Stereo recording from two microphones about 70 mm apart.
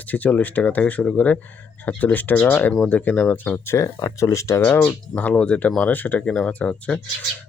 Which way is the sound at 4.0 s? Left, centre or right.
Left.